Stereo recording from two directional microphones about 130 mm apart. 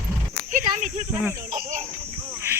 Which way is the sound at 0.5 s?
75° right (ahead or behind).